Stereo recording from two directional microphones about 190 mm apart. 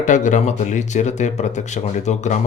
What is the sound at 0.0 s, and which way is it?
Speech, 40° left (ahead or behind).